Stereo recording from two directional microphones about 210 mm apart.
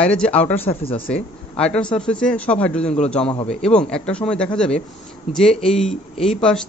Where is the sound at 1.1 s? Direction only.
5° left (ahead or behind).